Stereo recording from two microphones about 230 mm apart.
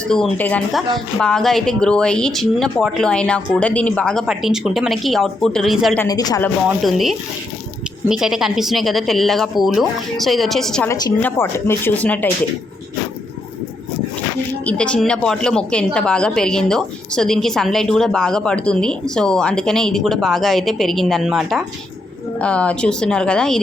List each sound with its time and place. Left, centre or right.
0.1 s a woman's voice: centre
6.1 s speech: centre
6.7 s a woman's voice: centre
10.9 s speech: centre
14.6 s a woman's voice: centre